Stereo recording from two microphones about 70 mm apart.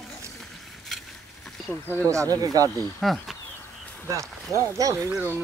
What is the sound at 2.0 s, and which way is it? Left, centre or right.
Speech, right.